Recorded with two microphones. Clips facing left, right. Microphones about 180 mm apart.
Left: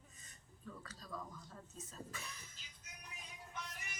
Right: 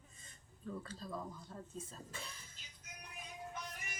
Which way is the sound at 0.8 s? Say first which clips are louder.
Right 4 dB; 30° right (ahead or behind).